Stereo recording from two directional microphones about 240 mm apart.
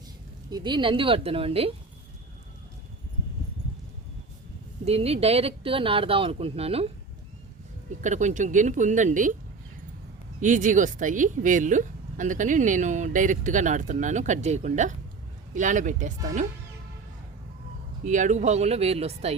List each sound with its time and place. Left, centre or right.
0.5 s speech: centre
4.9 s a woman's voice: right
10.4 s a woman's voice: right
18.0 s speech: right